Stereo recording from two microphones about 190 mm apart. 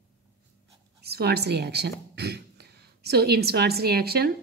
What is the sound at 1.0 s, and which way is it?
Speech, 55° right (ahead or behind).